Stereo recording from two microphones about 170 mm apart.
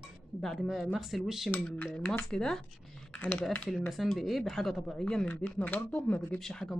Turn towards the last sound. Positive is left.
turn(degrees=5)  # may be behind; listen again after turning